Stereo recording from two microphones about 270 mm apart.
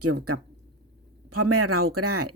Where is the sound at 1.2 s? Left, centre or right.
Right.